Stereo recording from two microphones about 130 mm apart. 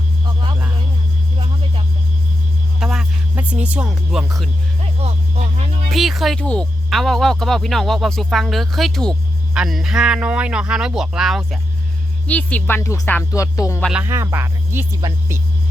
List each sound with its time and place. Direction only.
2.8 s music: 5° right (ahead or behind)
4.8 s music: 50° right (ahead or behind)
5.9 s speech: centre (ahead or behind)
12.3 s speech: 10° left (ahead or behind)
13.9 s speech: 20° right (ahead or behind)